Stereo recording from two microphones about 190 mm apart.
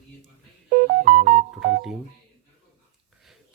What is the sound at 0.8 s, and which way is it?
Music, 45° right (ahead or behind).